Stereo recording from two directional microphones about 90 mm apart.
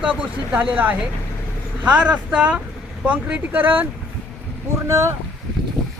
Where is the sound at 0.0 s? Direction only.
15° right (ahead or behind).